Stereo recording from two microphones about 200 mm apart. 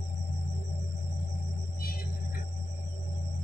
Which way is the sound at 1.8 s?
50° left (ahead or behind).